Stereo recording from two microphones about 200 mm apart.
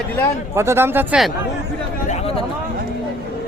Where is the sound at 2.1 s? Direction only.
30° left (ahead or behind).